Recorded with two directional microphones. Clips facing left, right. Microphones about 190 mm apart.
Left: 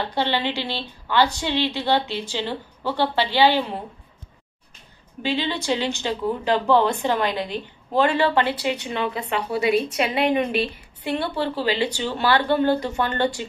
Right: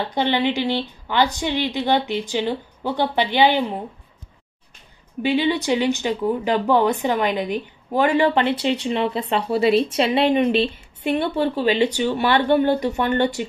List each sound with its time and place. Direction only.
0.1 s a woman's voice: 15° right (ahead or behind)
5.2 s speech: 15° right (ahead or behind)